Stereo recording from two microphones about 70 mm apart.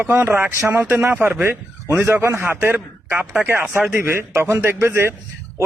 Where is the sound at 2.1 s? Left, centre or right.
Right.